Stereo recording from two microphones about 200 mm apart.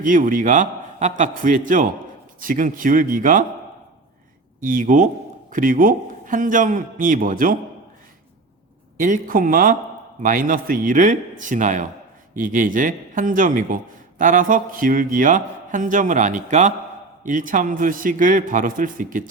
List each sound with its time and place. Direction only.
0.0 s a man's voice: 40° right (ahead or behind)
4.6 s a man's voice: 45° right (ahead or behind)
9.0 s a man's voice: 40° right (ahead or behind)